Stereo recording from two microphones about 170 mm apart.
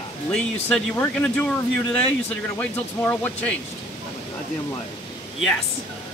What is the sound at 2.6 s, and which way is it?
Speech, 10° left (ahead or behind).